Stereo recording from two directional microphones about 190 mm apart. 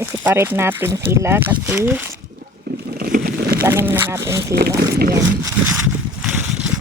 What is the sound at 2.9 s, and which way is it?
Vehicle, 50° right (ahead or behind).